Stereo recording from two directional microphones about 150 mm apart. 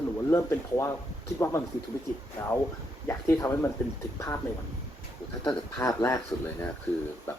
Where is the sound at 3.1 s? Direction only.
20° left (ahead or behind).